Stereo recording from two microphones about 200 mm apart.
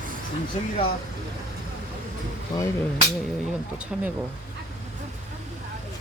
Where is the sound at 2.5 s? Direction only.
20° left (ahead or behind).